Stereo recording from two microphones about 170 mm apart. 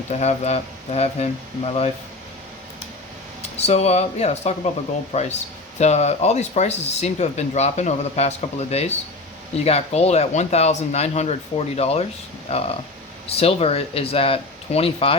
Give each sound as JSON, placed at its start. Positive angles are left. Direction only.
{"t": 0.1, "sound": "speech", "side_deg": 40}
{"t": 3.6, "sound": "speech", "side_deg": 40}